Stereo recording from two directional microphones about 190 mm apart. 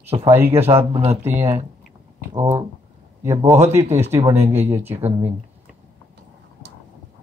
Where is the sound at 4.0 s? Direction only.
15° right (ahead or behind).